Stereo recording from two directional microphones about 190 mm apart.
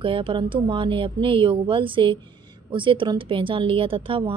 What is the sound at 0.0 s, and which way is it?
A woman's voice, 25° right (ahead or behind).